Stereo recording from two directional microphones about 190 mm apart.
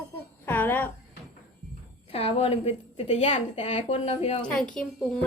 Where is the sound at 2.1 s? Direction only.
30° left (ahead or behind).